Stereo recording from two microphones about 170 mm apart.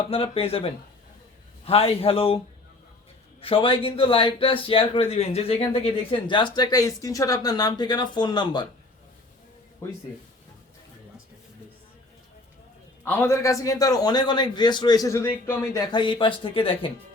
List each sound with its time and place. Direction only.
0.1 s a man's voice: 35° left (ahead or behind)
3.4 s a man's voice: 30° left (ahead or behind)
13.1 s a man's voice: 15° left (ahead or behind); by 16.9 s 30° left (ahead or behind)